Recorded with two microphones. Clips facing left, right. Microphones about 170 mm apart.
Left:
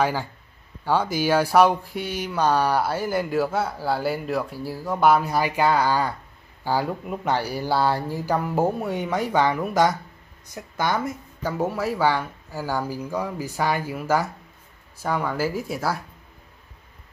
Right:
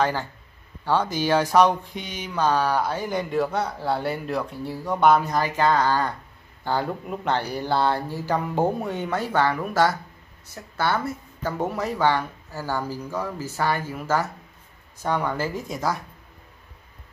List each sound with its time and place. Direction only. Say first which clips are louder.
0.0 s a woman's voice: even; 10° left (ahead or behind)
11.5 s speech: left 2 dB; 5° left (ahead or behind)